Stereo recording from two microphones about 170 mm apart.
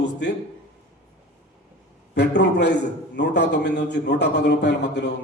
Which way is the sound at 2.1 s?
80° left.